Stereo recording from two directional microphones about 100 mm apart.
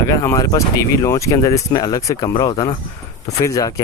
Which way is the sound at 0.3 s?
35° left (ahead or behind).